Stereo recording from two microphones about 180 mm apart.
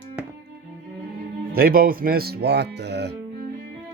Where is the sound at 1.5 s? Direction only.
55° right (ahead or behind).